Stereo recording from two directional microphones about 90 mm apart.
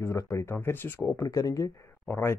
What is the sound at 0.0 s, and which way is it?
Speech, 35° left (ahead or behind).